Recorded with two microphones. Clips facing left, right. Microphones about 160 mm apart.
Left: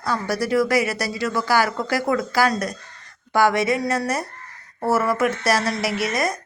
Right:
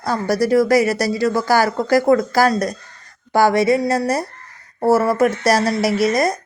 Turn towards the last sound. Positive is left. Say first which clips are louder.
# right 6 dB
turn(degrees=-35)  # may be behind; listen again after turning